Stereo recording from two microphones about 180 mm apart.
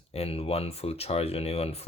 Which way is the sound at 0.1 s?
35° left (ahead or behind).